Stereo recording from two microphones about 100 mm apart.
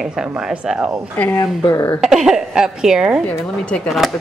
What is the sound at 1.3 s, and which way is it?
Speech, 35° left (ahead or behind).